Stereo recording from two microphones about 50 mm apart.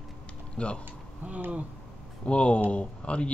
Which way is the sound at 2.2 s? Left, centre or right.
Left.